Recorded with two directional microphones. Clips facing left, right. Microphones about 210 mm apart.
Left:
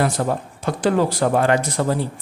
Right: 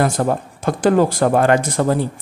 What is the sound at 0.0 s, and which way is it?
A man's voice, 50° right (ahead or behind).